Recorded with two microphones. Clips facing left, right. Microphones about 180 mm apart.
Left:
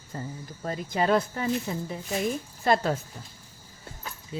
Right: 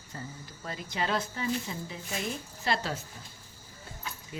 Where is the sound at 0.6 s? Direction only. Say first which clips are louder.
Left 8 dB; 45° left (ahead or behind).